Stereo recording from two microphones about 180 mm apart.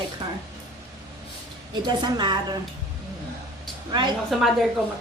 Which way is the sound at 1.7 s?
25° right (ahead or behind).